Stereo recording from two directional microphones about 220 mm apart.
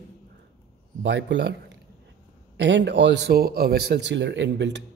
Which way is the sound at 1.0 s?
55° right (ahead or behind).